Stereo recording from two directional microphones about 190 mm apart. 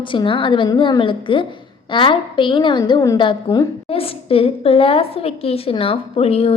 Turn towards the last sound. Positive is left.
turn(degrees=30)  # may be behind; listen again after turning